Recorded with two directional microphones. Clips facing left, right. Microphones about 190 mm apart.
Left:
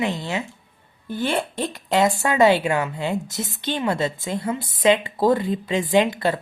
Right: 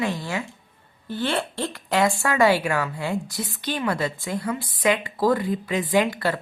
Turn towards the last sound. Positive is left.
turn(degrees=20)  # may be behind; listen again after turning